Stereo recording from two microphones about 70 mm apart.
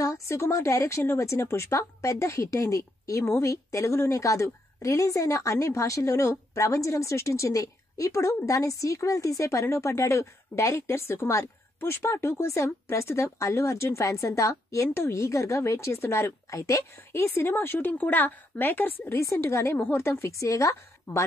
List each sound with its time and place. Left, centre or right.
0.0 s a woman's voice: left
17.1 s a woman's voice: left